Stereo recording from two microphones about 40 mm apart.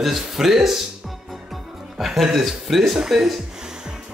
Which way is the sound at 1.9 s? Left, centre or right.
Centre.